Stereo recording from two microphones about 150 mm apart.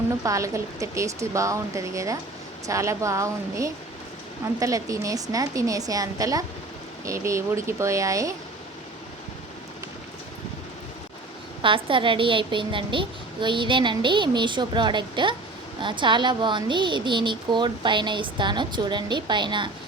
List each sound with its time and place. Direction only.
0.2 s speech: 20° right (ahead or behind)
11.6 s a woman's voice: 35° right (ahead or behind)